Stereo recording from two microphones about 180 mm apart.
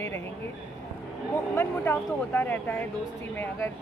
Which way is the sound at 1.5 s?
10° left (ahead or behind).